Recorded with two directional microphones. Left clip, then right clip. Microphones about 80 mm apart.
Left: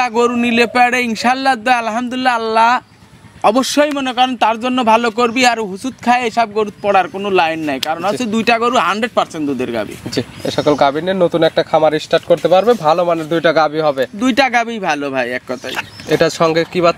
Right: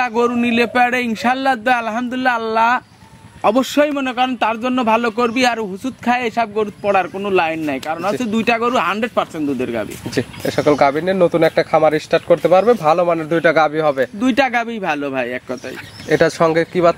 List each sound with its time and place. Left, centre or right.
0.0 s a man's voice: left
10.1 s speech: centre; by 15.4 s left
16.1 s speech: centre